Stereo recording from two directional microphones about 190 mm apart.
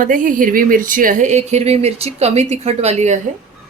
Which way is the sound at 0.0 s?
45° right (ahead or behind).